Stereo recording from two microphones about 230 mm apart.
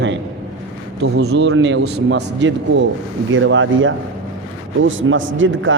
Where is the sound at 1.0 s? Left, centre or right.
Right.